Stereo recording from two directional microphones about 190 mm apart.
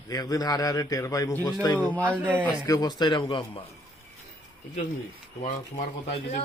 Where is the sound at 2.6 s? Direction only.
20° left (ahead or behind).